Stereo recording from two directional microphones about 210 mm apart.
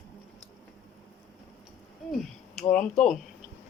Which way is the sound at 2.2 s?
5° left (ahead or behind).